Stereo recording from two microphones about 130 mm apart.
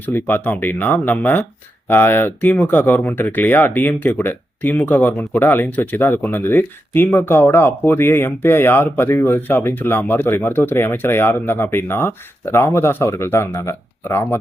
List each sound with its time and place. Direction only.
0.0 s speech: 15° left (ahead or behind)